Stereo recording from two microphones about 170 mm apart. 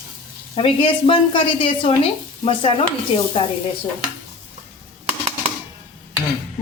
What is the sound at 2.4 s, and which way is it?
Stir, 30° left (ahead or behind).